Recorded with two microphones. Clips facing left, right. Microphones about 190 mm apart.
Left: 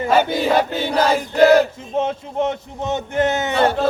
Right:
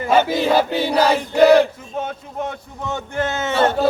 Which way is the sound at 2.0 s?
25° left (ahead or behind).